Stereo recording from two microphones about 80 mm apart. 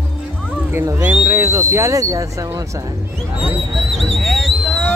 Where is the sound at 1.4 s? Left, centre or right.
Right.